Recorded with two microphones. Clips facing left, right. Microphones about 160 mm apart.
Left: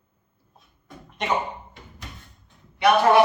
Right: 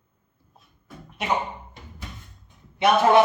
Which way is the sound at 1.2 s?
5° right (ahead or behind).